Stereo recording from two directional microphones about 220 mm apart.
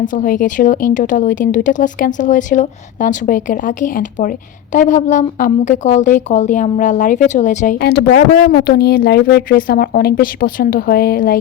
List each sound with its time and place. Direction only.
0.0 s speech: 35° left (ahead or behind)
7.8 s speech: 45° left (ahead or behind)